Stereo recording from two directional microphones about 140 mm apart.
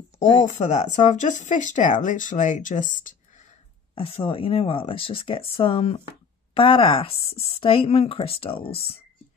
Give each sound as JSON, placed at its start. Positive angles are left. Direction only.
{"t": 0.2, "sound": "speech", "side_deg": 60}
{"t": 3.9, "sound": "speech", "side_deg": 40}